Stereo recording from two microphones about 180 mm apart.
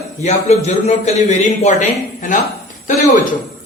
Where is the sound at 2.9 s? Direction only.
45° left (ahead or behind).